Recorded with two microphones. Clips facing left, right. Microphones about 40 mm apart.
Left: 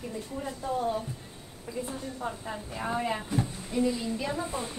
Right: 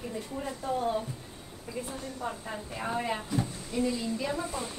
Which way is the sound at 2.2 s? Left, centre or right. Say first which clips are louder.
Even; centre.